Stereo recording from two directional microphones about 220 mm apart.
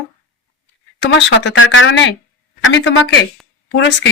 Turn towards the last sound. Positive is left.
turn(degrees=55)  # may be behind; listen again after turning